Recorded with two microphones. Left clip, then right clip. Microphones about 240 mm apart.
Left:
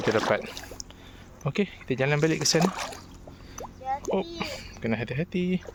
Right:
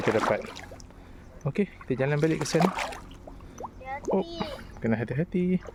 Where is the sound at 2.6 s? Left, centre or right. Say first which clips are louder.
Right 1 dB; centre.